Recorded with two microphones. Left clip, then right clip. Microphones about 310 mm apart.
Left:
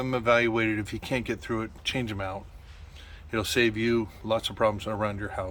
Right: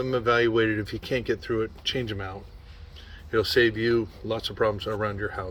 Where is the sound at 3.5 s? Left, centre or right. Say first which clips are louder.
Right 2 dB; left.